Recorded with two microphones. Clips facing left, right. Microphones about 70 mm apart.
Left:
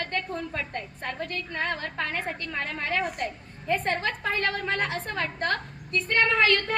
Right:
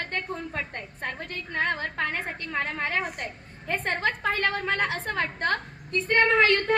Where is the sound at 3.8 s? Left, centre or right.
Right.